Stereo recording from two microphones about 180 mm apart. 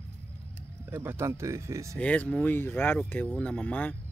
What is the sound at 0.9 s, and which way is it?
Speech, 10° right (ahead or behind).